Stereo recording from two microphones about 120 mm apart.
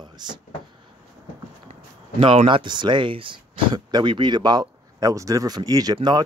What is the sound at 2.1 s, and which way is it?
Speech, 45° right (ahead or behind).